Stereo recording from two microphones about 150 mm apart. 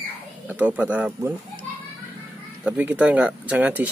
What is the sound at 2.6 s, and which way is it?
Speech, 10° right (ahead or behind).